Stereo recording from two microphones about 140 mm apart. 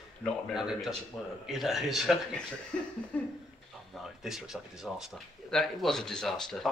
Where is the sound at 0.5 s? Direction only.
5° right (ahead or behind).